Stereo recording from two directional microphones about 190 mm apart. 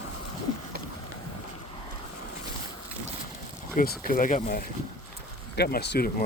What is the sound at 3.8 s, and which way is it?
Speech, 45° left (ahead or behind).